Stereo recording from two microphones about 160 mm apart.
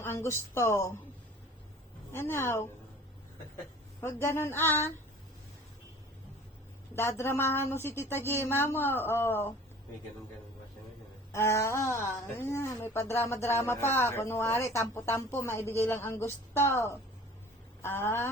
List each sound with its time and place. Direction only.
0.0 s speech: 15° left (ahead or behind)
2.1 s speech: 15° left (ahead or behind)
4.0 s speech: 15° left (ahead or behind)
6.9 s speech: 15° left (ahead or behind)
11.3 s speech: 15° left (ahead or behind)